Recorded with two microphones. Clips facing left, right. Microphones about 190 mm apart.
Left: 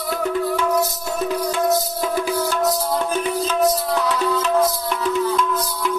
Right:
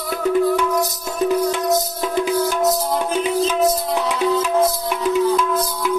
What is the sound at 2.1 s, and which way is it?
Music, 20° right (ahead or behind).